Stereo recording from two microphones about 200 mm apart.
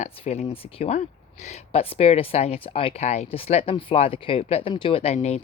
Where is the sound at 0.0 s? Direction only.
30° left (ahead or behind).